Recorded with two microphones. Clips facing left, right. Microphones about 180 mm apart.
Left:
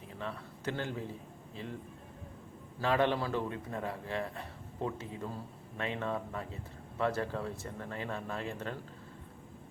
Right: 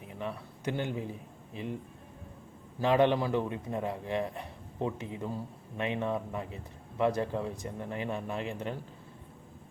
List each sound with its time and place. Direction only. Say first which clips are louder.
0.1 s a man's voice: right 3 dB; 15° right (ahead or behind)
2.8 s a man's voice: right 4 dB; 20° right (ahead or behind)